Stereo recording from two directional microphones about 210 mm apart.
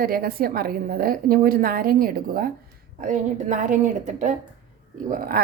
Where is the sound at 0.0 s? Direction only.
45° right (ahead or behind).